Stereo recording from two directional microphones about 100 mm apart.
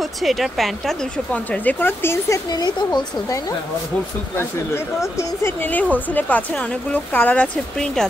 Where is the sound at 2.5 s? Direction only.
40° left (ahead or behind).